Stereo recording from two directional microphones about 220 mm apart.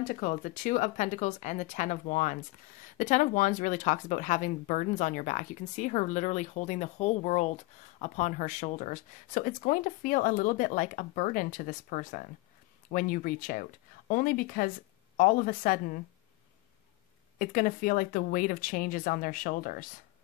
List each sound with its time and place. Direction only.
0.0 s speech: 35° left (ahead or behind)
17.4 s speech: 40° left (ahead or behind)